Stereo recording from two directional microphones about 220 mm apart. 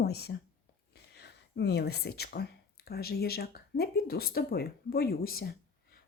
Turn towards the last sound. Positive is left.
turn(degrees=40)  # may be behind; listen again after turning